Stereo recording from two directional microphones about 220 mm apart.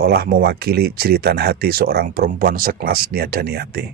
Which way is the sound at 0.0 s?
45° right (ahead or behind).